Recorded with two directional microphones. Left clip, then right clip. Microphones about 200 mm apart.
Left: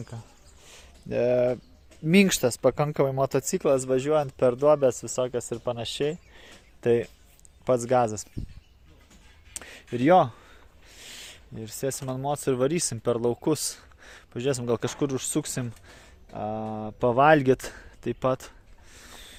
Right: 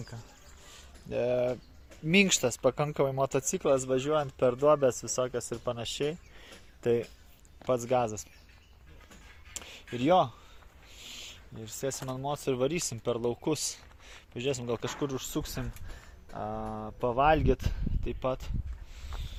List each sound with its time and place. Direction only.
1.1 s speech: 50° left (ahead or behind)
9.9 s speech: 55° left (ahead or behind)
11.5 s speech: 65° left (ahead or behind)
16.3 s speech: 55° left (ahead or behind)